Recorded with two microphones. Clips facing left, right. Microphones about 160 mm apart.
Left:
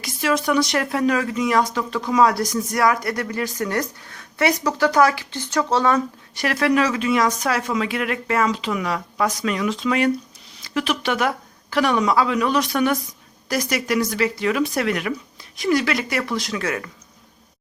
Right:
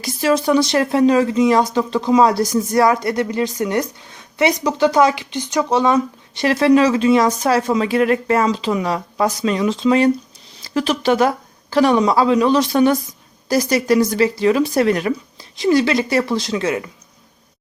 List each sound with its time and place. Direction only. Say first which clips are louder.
0.0 s speech: right 5 dB; 35° right (ahead or behind)